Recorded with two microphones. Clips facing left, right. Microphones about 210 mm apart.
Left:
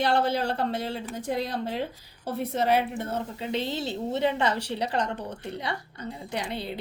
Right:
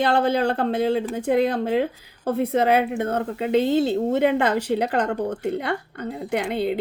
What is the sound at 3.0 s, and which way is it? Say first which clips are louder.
Speech: right 8 dB; 60° right (ahead or behind).